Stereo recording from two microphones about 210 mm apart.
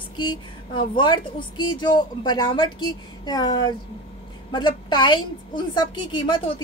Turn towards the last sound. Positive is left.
turn(degrees=20)  # may be behind; listen again after turning